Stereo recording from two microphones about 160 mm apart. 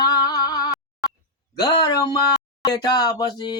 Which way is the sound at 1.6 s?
25° left (ahead or behind).